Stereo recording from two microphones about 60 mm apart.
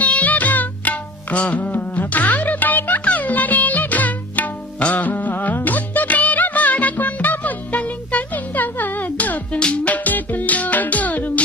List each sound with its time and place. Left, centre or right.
0.0 s music: left